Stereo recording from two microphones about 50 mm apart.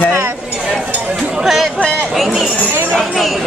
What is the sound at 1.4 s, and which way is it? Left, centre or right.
Speech, centre.